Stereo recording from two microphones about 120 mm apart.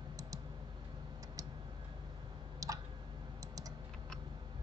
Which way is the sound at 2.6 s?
30° right (ahead or behind).